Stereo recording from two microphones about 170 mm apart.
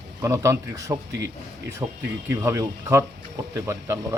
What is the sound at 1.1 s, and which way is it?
Speech, 80° right.